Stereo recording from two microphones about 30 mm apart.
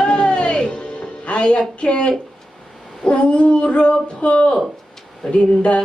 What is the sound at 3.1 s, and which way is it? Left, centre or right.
A woman's voice, left.